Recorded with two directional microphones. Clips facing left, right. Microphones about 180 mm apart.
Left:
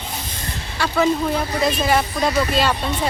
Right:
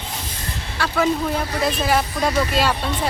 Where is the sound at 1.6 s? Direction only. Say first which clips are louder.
Left 1 dB; 5° right (ahead or behind).